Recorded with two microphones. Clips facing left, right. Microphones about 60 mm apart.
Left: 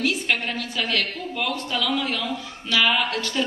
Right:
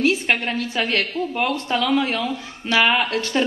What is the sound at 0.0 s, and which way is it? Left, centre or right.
A woman's voice, right.